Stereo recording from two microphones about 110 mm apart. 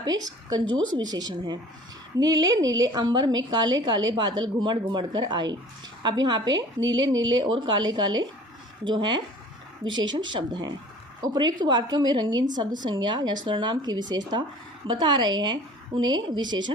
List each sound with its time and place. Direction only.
0.0 s a woman's voice: 35° right (ahead or behind)